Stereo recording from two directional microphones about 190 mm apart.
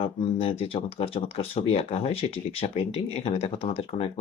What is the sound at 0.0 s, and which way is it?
Speech, 30° left (ahead or behind).